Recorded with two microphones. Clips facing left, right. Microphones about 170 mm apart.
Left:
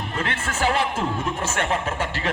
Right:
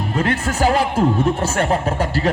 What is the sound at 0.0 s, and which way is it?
Speech, 40° right (ahead or behind).